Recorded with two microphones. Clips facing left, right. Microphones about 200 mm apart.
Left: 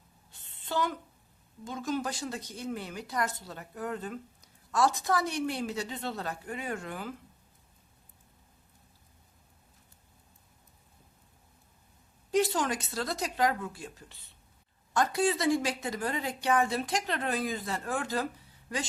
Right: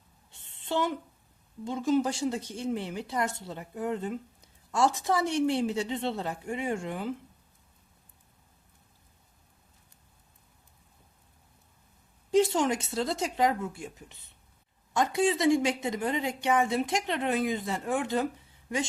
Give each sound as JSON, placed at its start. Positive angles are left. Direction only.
{"t": 0.3, "sound": "a sound", "side_deg": -25}
{"t": 1.6, "sound": "speech", "side_deg": -25}
{"t": 12.3, "sound": "speech", "side_deg": -25}